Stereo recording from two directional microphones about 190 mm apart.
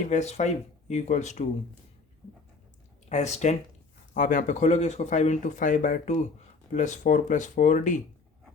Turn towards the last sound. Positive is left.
turn(degrees=40)  # may be behind; listen again after turning